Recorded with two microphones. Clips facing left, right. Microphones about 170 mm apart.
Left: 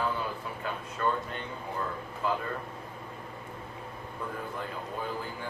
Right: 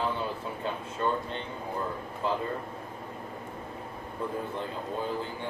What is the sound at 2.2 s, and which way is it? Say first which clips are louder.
Speech: right 1 dB; 25° right (ahead or behind).